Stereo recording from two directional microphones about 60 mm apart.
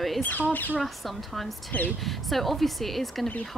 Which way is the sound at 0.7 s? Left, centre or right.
Centre.